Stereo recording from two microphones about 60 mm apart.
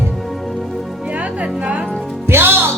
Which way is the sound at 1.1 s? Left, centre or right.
Right.